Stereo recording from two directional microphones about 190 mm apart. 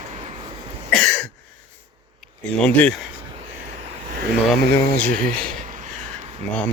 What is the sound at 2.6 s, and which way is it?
Speech, 5° left (ahead or behind).